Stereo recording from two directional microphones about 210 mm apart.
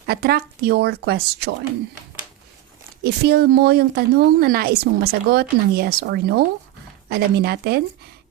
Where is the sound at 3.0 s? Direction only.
50° right (ahead or behind).